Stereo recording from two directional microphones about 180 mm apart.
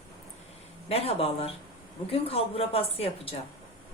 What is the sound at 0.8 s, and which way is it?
Speech, 35° left (ahead or behind).